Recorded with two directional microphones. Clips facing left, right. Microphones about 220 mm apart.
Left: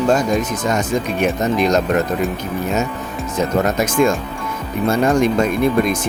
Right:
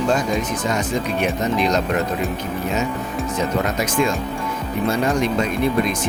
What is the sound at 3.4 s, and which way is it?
Speech, 45° left (ahead or behind).